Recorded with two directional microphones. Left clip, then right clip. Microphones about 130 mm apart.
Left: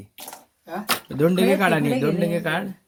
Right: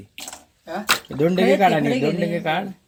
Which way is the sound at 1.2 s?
25° left (ahead or behind).